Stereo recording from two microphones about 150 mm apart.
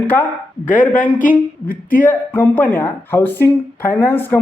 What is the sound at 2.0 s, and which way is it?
Speech, 10° left (ahead or behind).